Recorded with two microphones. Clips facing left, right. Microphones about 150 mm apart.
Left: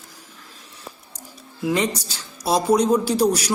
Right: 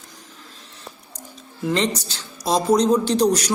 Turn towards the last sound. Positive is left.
turn(degrees=10)  # may be behind; listen again after turning